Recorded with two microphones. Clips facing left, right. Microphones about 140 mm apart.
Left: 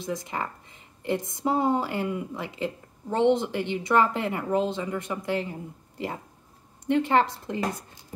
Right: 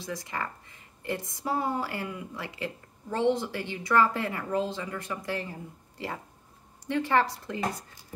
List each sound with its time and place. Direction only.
0.0 s a woman's voice: 20° left (ahead or behind)